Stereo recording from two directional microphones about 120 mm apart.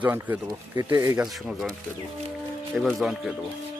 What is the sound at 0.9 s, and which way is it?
Speech, 30° right (ahead or behind).